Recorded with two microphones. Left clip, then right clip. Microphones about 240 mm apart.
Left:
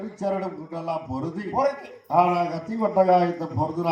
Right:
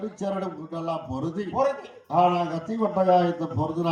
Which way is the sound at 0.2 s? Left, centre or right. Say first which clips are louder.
Left 4 dB; right.